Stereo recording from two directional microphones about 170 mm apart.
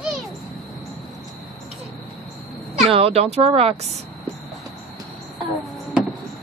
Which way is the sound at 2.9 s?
35° right (ahead or behind).